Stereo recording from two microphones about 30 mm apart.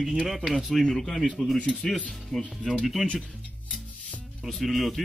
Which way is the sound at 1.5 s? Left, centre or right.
Left.